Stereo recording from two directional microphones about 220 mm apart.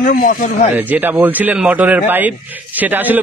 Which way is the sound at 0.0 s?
40° left (ahead or behind).